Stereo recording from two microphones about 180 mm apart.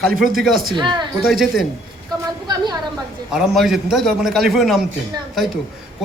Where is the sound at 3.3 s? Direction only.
Centre (ahead or behind).